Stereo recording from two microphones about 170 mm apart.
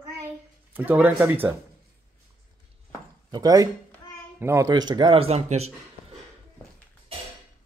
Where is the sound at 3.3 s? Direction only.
20° right (ahead or behind); by 5.7 s 40° right (ahead or behind).